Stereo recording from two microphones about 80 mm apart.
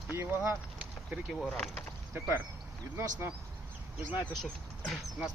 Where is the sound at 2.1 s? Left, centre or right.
Right.